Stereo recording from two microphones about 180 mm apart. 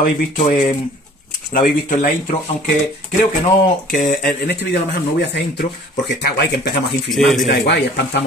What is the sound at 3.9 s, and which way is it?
Speech, 55° left (ahead or behind).